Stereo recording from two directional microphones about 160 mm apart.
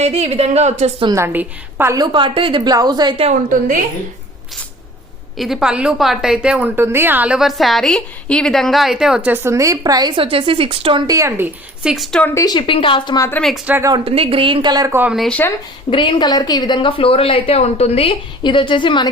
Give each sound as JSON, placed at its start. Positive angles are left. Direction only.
{"t": 0.0, "sound": "speech", "side_deg": -40}
{"t": 1.1, "sound": "a woman's voice", "side_deg": -15}
{"t": 2.0, "sound": "a woman's voice", "side_deg": -30}
{"t": 3.2, "sound": "a woman's voice", "side_deg": -55}
{"t": 5.4, "sound": "a woman's voice", "side_deg": 0}
{"t": 11.8, "sound": "speech", "side_deg": 0}
{"t": 12.2, "sound": "speech", "side_deg": 20}
{"t": 13.7, "sound": "a woman's voice", "side_deg": -15}
{"t": 13.9, "sound": "speech", "side_deg": -35}
{"t": 14.9, "sound": "speech", "side_deg": -5}
{"t": 15.9, "sound": "a woman's voice", "side_deg": 30}